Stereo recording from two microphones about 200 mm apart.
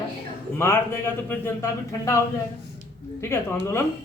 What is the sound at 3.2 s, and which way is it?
Speech, 10° left (ahead or behind).